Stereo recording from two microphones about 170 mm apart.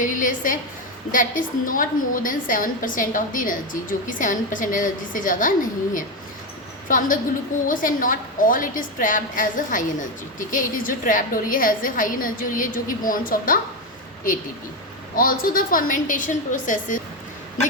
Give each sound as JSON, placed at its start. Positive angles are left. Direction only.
{"t": 0.0, "sound": "a woman's voice", "side_deg": 50}
{"t": 15.1, "sound": "a woman's voice", "side_deg": 55}